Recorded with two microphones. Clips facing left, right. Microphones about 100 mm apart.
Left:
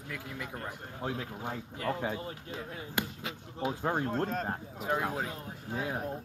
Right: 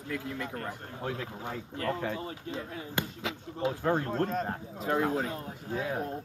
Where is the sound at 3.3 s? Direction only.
90° right.